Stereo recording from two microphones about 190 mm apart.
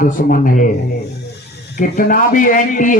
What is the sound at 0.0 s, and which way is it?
Speech, 45° left (ahead or behind).